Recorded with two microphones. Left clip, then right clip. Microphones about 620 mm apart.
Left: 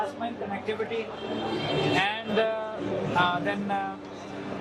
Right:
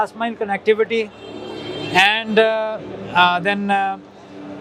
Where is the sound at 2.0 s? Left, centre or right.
Right.